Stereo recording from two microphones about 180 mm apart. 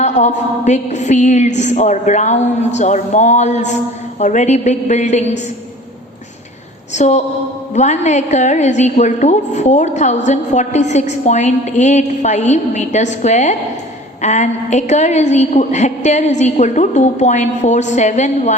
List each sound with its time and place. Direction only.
0.0 s a woman's voice: 40° left (ahead or behind)
6.9 s a woman's voice: 40° left (ahead or behind)